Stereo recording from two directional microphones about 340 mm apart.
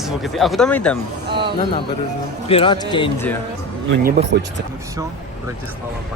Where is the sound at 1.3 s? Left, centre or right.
Centre.